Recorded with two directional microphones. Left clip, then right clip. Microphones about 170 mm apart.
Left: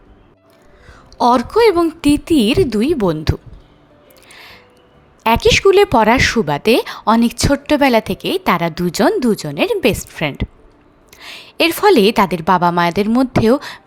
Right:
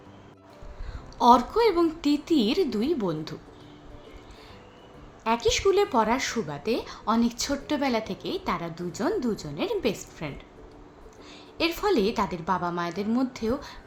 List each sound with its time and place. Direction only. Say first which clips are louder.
1.2 s a woman's voice: left 8 dB; 50° left (ahead or behind)
4.3 s music: left 10 dB; 65° left (ahead or behind)
5.2 s a woman's voice: left 12 dB; 65° left (ahead or behind)